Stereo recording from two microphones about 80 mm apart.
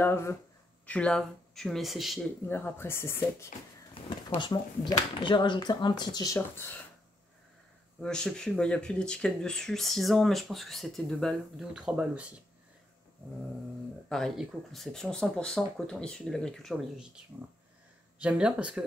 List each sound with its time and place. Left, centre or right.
0.0 s speech: left
0.8 s speech: centre
2.4 s speech: left
3.9 s speech: left
6.2 s speech: left
8.0 s speech: centre
11.7 s speech: centre
14.0 s speech: centre
17.3 s speech: right